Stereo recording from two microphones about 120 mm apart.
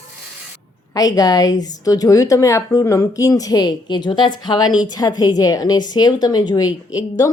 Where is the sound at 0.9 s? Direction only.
30° left (ahead or behind).